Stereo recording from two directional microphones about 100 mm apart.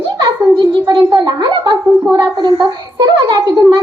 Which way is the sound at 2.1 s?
40° right (ahead or behind).